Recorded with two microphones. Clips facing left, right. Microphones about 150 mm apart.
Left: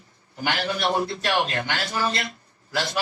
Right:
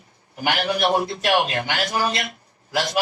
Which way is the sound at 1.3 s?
60° right (ahead or behind).